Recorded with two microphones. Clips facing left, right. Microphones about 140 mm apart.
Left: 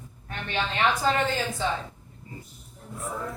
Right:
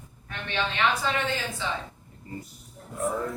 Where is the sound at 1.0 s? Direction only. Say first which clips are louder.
Left 4 dB; 40° left (ahead or behind).